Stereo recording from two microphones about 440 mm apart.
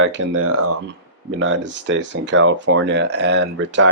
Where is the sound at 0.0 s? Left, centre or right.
Right.